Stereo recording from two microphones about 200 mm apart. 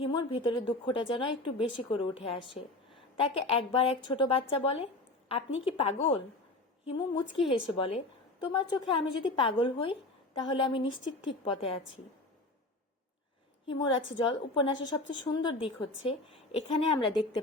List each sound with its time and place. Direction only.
0.0 s a woman's voice: 25° left (ahead or behind)
13.7 s a woman's voice: 25° left (ahead or behind)